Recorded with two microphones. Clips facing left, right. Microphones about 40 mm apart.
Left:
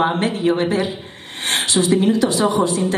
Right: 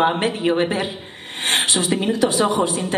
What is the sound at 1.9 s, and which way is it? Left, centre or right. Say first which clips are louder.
Speech: left 1 dB; right.